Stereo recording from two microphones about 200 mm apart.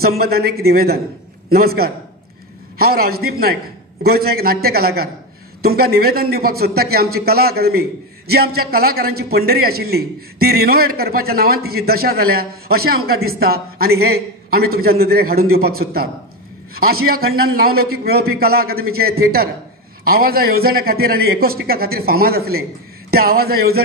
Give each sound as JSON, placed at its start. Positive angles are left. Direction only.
{"t": 0.0, "sound": "a man's voice", "side_deg": -50}